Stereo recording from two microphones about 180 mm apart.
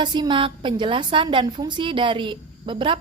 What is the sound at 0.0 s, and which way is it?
A woman's voice, 25° right (ahead or behind).